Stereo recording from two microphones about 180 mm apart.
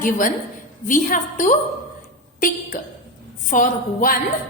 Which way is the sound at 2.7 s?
45° left (ahead or behind).